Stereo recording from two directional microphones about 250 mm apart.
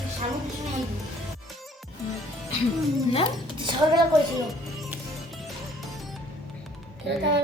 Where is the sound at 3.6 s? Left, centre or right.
Centre.